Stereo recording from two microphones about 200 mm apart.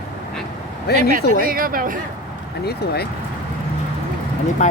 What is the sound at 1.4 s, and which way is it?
Speech, 45° right (ahead or behind).